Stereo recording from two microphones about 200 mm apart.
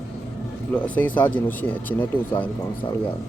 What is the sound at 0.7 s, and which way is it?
Speech, 5° left (ahead or behind).